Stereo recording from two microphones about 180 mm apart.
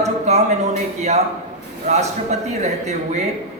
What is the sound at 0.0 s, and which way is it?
A man's voice, 40° right (ahead or behind).